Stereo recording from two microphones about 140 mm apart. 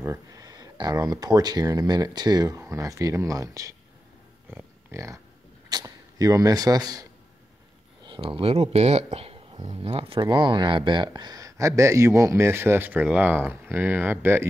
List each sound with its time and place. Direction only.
0.0 s speech: 20° right (ahead or behind)
4.5 s a sound: 15° right (ahead or behind)
5.7 s speech: 30° right (ahead or behind)
8.1 s speech: 40° right (ahead or behind); by 14.5 s 15° right (ahead or behind)